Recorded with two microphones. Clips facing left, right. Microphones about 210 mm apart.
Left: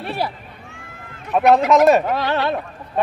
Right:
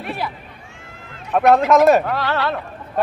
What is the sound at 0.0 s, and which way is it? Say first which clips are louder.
Cat: left 2 dB; 35° left (ahead or behind).